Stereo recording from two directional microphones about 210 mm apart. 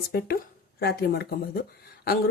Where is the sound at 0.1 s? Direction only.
50° left (ahead or behind).